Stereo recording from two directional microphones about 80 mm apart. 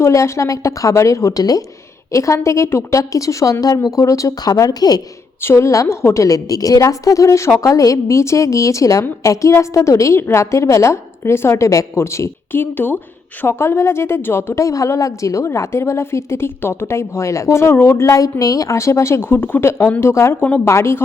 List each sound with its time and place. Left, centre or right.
0.0 s a woman's voice: left
5.4 s a woman's voice: left